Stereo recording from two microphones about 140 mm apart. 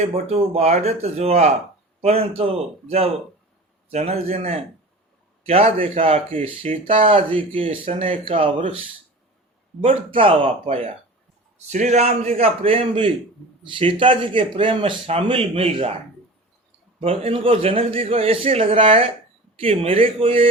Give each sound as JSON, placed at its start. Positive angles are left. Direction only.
{"t": 0.0, "sound": "speech", "side_deg": -45}
{"t": 9.8, "sound": "speech", "side_deg": -40}
{"t": 17.0, "sound": "speech", "side_deg": -45}